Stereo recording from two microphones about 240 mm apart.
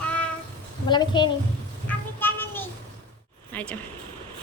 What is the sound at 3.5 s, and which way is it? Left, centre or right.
Speech, centre.